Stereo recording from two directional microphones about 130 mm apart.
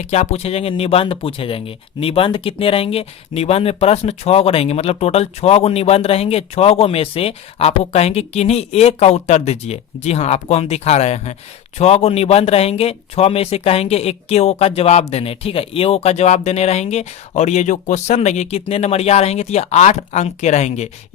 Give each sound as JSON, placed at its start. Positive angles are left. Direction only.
{"t": 0.0, "sound": "speech", "side_deg": 60}